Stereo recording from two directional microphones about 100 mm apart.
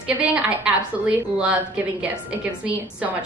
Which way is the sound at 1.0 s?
10° right (ahead or behind).